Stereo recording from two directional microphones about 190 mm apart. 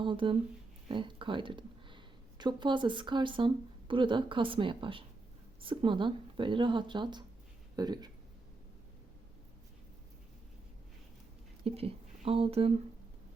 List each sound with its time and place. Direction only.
0.0 s speech: 25° right (ahead or behind)
11.6 s speech: 30° right (ahead or behind)